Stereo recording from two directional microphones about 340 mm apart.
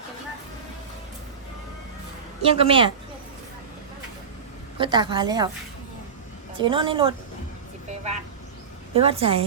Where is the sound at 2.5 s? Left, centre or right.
Centre.